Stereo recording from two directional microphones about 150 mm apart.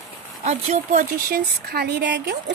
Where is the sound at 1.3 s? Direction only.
90° right.